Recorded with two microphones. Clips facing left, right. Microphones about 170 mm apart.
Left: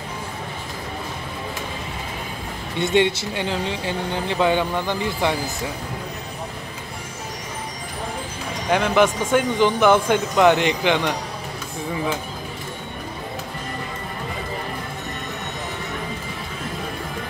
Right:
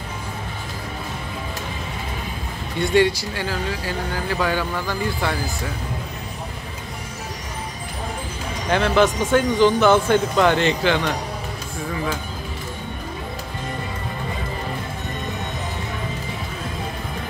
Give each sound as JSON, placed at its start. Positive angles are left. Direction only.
{"t": 2.8, "sound": "speech", "side_deg": 20}
{"t": 8.7, "sound": "speech", "side_deg": 15}